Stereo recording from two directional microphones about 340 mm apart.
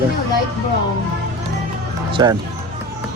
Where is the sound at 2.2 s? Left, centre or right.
Centre.